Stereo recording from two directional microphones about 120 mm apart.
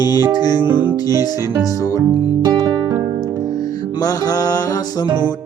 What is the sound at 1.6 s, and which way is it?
Speech, 30° left (ahead or behind).